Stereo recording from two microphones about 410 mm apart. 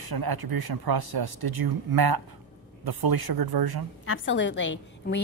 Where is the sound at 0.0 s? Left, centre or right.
Right.